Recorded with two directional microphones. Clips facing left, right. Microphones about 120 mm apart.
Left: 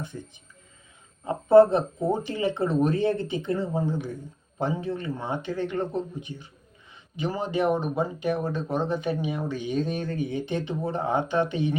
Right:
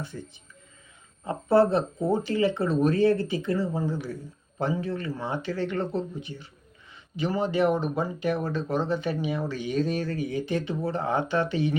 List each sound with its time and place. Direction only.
1.2 s speech: 20° left (ahead or behind)